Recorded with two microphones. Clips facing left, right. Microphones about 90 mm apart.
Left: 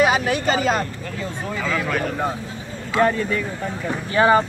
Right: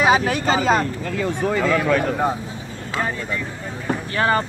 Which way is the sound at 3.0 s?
65° left (ahead or behind).